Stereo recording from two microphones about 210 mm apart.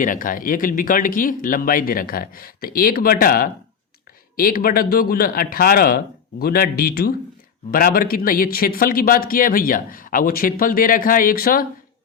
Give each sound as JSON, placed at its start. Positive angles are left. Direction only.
{"t": 0.0, "sound": "speech", "side_deg": 40}